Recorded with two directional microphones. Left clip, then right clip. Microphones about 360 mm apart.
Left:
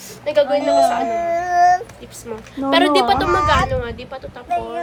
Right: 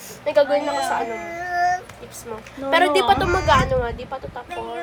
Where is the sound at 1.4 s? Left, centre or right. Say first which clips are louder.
Left 6 dB; centre.